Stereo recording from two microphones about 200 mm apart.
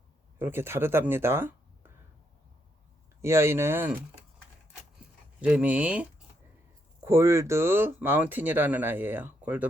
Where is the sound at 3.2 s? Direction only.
15° right (ahead or behind).